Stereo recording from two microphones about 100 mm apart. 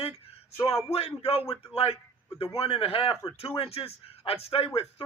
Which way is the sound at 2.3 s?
75° left (ahead or behind).